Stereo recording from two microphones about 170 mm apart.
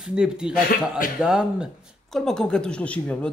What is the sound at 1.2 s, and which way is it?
Speech, 5° right (ahead or behind).